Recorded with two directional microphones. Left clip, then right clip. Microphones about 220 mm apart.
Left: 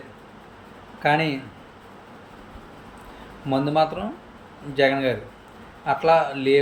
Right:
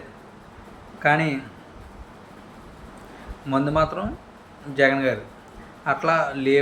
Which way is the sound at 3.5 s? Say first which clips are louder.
Left 1 dB; 10° left (ahead or behind).